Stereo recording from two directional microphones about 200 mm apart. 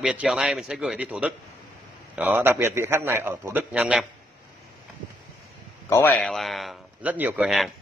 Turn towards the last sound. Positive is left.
turn(degrees=0)  # may be behind; listen again after turning